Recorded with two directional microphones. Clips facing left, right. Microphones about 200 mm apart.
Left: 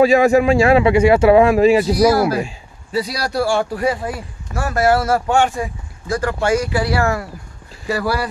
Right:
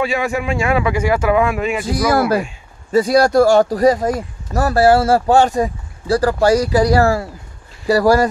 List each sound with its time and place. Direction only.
0.0 s speech: 40° left (ahead or behind)
2.9 s speech: 50° right (ahead or behind)